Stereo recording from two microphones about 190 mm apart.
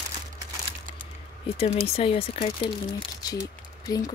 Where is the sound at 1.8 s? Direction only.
30° left (ahead or behind).